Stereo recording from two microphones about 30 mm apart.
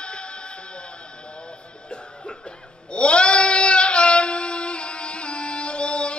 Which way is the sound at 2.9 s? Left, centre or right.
Left.